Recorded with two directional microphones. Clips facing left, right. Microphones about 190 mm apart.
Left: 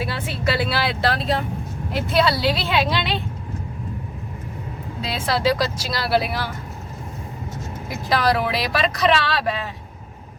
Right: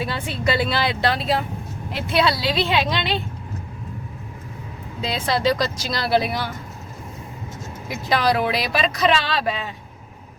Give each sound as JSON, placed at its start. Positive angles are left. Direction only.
{"t": 0.0, "sound": "speech", "side_deg": 5}
{"t": 5.0, "sound": "speech", "side_deg": 5}
{"t": 7.9, "sound": "speech", "side_deg": 0}